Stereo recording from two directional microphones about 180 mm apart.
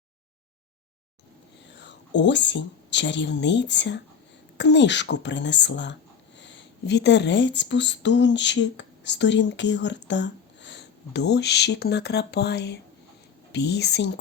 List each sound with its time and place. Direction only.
1.7 s speech: 80° left